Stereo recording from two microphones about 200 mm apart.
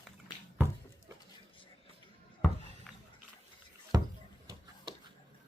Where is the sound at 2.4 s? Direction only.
5° left (ahead or behind).